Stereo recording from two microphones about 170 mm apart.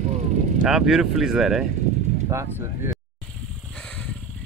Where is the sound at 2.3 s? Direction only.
15° right (ahead or behind).